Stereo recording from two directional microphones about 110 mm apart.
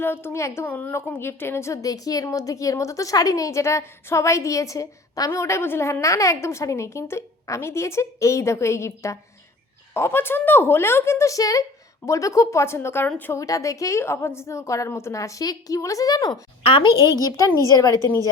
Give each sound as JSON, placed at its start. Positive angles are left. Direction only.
{"t": 0.0, "sound": "a woman's voice", "side_deg": 20}
{"t": 13.3, "sound": "a woman's voice", "side_deg": 30}
{"t": 16.6, "sound": "a woman's voice", "side_deg": 55}
{"t": 16.9, "sound": "a woman's voice", "side_deg": 35}